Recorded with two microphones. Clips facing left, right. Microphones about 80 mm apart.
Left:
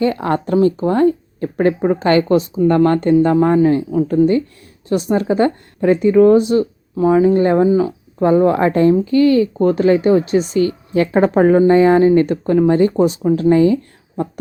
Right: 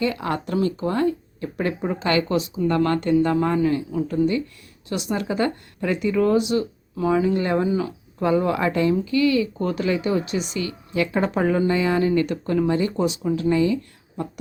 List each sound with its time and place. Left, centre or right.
0.0 s speech: left